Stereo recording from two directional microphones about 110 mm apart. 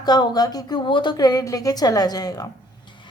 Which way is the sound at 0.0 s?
40° left (ahead or behind).